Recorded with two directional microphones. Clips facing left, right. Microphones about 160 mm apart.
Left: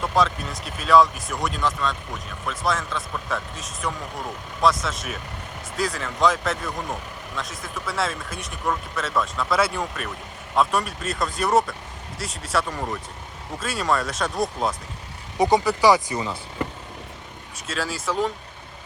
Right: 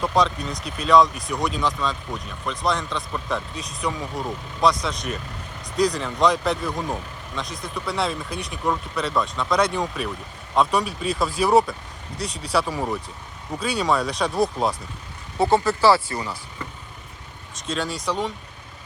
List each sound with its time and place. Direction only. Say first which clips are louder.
0.0 s speech: right 1 dB; centre (ahead or behind)
15.4 s speech: even; 15° left (ahead or behind)
17.7 s speech: right 1 dB; centre (ahead or behind)